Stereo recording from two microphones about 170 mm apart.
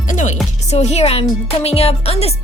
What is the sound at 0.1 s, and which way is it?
Music, 45° left (ahead or behind).